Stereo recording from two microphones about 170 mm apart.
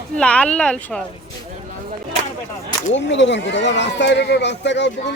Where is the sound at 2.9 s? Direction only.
90° left.